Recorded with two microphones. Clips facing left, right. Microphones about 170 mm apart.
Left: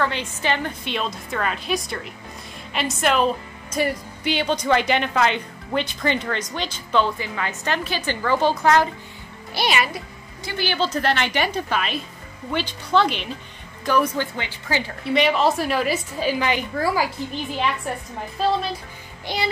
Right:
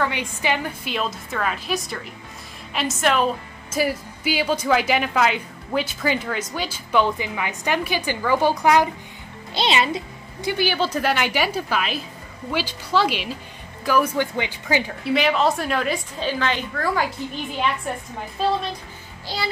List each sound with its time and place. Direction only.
0.0 s a woman's voice: 15° right (ahead or behind)
9.5 s a woman's voice: 25° right (ahead or behind)
15.0 s a woman's voice: centre (ahead or behind)
19.2 s music: 20° left (ahead or behind)